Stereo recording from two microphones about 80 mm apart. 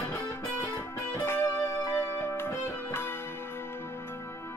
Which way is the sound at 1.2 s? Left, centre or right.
Left.